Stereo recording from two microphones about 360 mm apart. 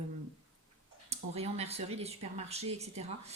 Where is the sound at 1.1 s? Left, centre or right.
Centre.